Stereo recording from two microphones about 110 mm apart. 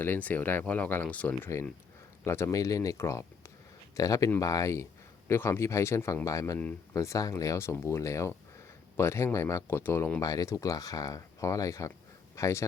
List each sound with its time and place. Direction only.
0.0 s speech: 15° left (ahead or behind)
2.2 s speech: 25° left (ahead or behind)
10.2 s speech: 30° left (ahead or behind)